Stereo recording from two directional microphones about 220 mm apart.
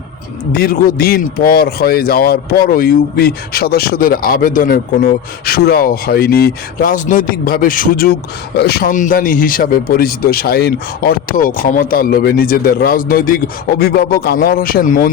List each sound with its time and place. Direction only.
0.5 s a man's voice: 40° left (ahead or behind)